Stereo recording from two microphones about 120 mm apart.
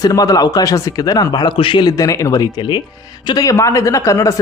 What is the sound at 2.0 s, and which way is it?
A man's voice, 30° left (ahead or behind).